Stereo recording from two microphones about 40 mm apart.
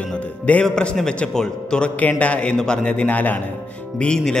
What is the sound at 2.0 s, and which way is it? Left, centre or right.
Speech, left.